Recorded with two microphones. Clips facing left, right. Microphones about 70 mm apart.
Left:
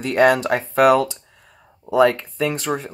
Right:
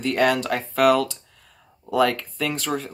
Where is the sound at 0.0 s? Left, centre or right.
Left.